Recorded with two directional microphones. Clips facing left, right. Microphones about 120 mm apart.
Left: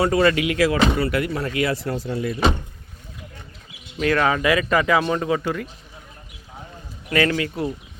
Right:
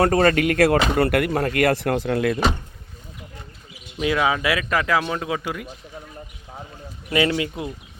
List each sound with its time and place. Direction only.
0.0 s speech: 45° right (ahead or behind)
3.9 s speech: 10° right (ahead or behind)
7.1 s speech: 20° right (ahead or behind)